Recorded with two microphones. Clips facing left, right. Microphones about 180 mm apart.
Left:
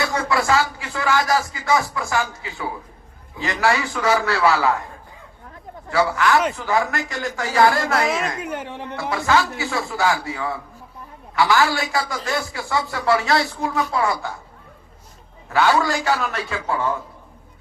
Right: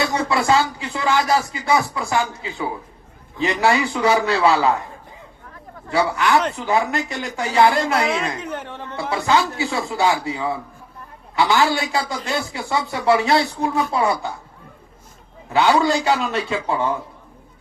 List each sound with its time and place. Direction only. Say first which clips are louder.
0.0 s speech: right 1 dB; 20° right (ahead or behind)
5.9 s speech: even; 20° right (ahead or behind)
8.4 s speech: left 1 dB; 10° left (ahead or behind)
9.0 s speech: right 1 dB; 20° right (ahead or behind)
15.4 s speech: right 2 dB; 20° right (ahead or behind)